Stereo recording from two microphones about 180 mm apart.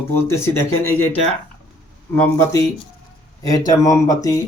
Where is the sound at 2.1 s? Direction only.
10° left (ahead or behind).